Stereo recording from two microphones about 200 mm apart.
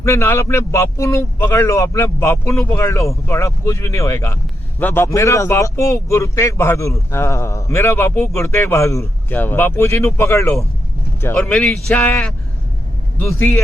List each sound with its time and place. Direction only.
0.0 s speech: 15° left (ahead or behind)